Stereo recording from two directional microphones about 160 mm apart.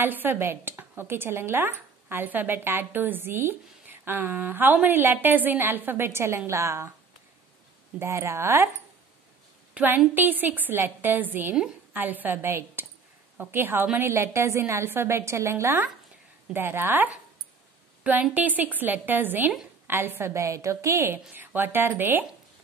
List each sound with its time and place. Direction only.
0.0 s a woman's voice: 10° right (ahead or behind)
8.0 s a woman's voice: 15° right (ahead or behind)
9.8 s a woman's voice: 10° right (ahead or behind)